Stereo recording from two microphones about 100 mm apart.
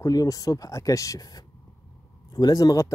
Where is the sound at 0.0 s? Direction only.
40° left (ahead or behind).